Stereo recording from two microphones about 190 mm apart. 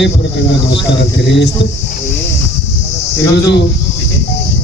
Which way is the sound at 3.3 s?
60° left (ahead or behind).